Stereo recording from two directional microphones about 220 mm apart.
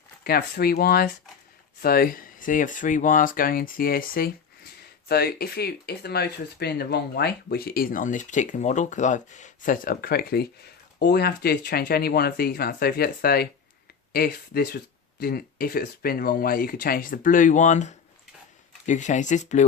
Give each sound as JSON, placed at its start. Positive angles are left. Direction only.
{"t": 0.3, "sound": "speech", "side_deg": 45}